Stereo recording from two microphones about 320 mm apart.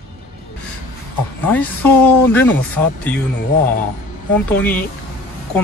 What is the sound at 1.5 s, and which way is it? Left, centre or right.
Speech, centre.